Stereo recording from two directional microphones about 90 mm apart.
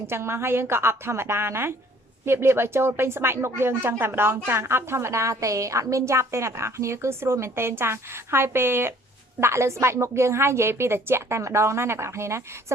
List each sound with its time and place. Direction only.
0.1 s speech: 30° right (ahead or behind)